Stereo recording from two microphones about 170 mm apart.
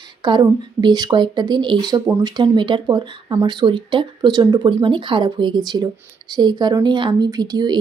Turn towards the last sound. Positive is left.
turn(degrees=-25)  # may be behind; listen again after turning